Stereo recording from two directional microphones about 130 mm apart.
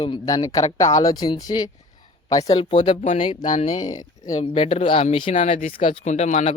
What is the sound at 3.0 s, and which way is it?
Speech, 55° left (ahead or behind).